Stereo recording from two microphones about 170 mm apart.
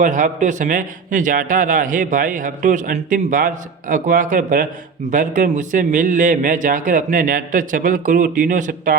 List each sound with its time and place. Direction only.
0.0 s a man's voice: 50° right (ahead or behind)